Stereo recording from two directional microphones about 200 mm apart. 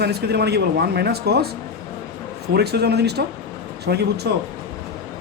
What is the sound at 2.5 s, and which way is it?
Speech, 55° right (ahead or behind).